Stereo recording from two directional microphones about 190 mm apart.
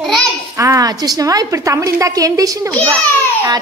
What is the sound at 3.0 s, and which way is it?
Speech, 10° left (ahead or behind).